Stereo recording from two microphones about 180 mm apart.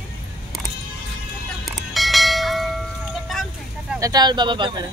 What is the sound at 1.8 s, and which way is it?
Bell, centre (ahead or behind).